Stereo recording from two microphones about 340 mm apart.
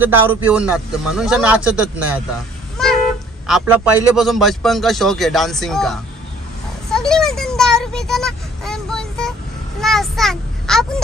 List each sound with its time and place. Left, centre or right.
0.0 s a man's voice: centre
3.4 s a man's voice: centre
6.9 s a sound: centre